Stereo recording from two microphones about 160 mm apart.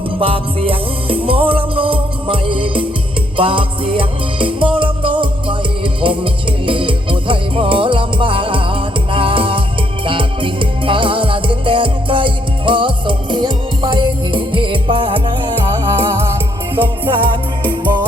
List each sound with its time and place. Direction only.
0.2 s music: 35° right (ahead or behind)
17.1 s music: 30° right (ahead or behind)